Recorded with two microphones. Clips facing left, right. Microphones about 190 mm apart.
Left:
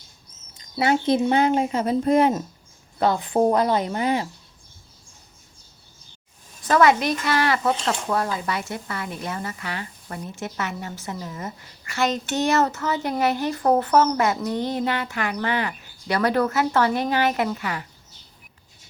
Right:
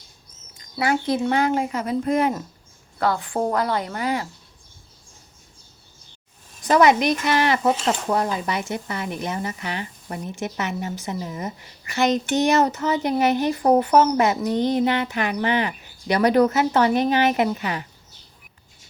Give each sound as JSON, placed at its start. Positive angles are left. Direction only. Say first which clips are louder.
{"t": 0.6, "sound": "speech", "louder": "left 2 dB", "side_deg": 25}
{"t": 6.7, "sound": "speech", "louder": "right 2 dB", "side_deg": -20}